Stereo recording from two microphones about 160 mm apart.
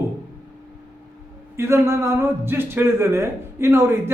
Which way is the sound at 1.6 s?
15° right (ahead or behind).